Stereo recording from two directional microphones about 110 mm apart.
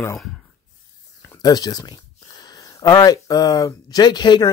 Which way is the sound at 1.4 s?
35° left (ahead or behind).